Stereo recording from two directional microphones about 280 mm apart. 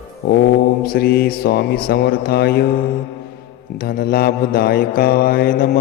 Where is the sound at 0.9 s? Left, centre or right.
Left.